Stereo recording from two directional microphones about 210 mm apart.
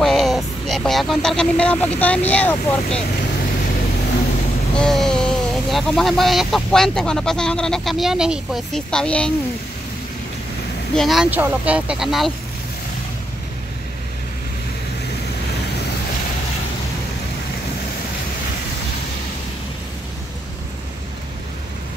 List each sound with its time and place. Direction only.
0.0 s speech: centre (ahead or behind)
4.7 s speech: centre (ahead or behind)
11.0 s speech: centre (ahead or behind)